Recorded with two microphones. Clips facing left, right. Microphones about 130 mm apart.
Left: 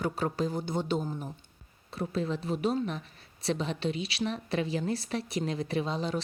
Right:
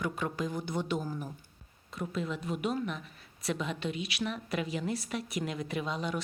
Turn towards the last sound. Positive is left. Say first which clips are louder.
# left 3 dB
turn(degrees=30)  # may be behind; listen again after turning